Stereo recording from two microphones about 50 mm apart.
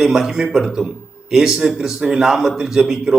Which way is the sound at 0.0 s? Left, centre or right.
Centre.